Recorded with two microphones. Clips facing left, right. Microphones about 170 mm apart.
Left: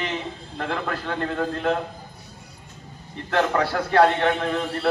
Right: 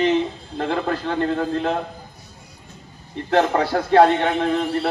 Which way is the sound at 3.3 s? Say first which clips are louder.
Right 4 dB; 35° right (ahead or behind).